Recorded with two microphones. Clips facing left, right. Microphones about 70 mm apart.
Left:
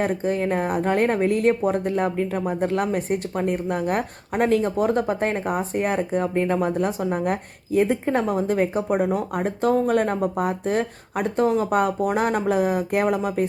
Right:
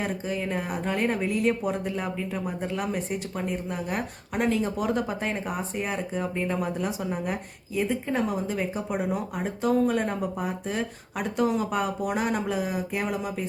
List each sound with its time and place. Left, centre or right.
0.3 s speech: left